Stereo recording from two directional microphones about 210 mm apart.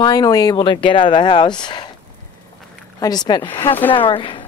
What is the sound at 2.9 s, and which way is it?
Speech, 20° left (ahead or behind).